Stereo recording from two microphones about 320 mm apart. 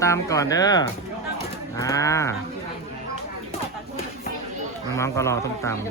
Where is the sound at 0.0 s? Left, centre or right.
Centre.